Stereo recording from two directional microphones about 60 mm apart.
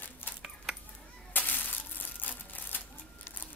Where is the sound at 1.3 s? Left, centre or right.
Left.